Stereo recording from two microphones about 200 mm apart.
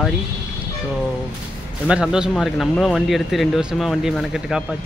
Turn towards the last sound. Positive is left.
turn(degrees=-5)  # may be behind; listen again after turning